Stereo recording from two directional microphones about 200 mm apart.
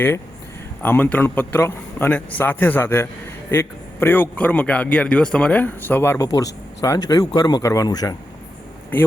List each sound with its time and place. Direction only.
0.8 s a man's voice: 10° left (ahead or behind)